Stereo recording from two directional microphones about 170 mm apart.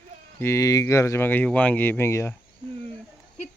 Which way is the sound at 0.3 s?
15° left (ahead or behind).